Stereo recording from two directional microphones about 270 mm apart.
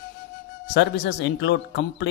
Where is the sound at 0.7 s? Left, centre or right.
Left.